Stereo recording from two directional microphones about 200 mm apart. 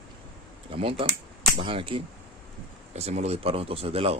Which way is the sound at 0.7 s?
30° right (ahead or behind).